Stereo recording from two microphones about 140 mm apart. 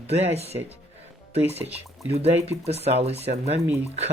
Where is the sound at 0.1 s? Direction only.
50° right (ahead or behind).